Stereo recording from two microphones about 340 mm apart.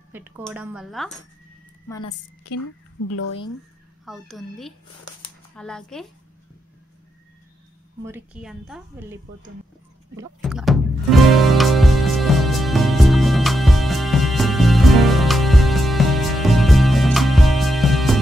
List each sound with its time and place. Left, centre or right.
0.1 s a woman's voice: centre
2.5 s a woman's voice: left
4.0 s a woman's voice: centre
8.0 s a woman's voice: centre
10.1 s music: centre